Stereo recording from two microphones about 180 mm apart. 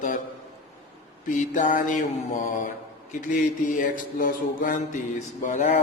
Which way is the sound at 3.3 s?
45° left (ahead or behind).